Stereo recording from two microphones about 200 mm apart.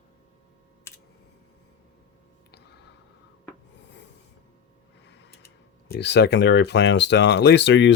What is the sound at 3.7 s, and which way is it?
Rub, 60° left (ahead or behind).